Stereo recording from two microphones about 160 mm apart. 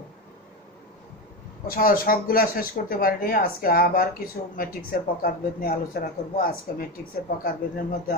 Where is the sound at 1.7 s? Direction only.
65° left (ahead or behind).